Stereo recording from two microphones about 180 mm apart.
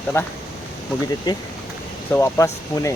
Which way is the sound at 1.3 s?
25° left (ahead or behind).